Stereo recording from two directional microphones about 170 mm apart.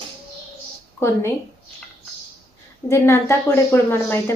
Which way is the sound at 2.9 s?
15° left (ahead or behind).